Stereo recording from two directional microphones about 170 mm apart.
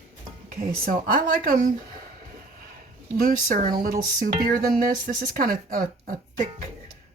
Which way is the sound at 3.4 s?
50° right (ahead or behind).